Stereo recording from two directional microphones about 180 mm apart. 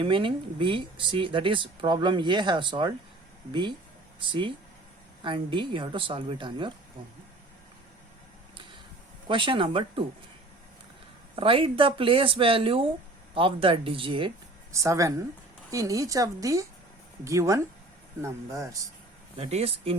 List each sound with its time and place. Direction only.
0.0 s speech: 30° right (ahead or behind)
9.2 s speech: 25° right (ahead or behind)
11.3 s speech: 30° right (ahead or behind)
14.7 s a woman's voice: 15° right (ahead or behind)
19.4 s speech: 35° right (ahead or behind)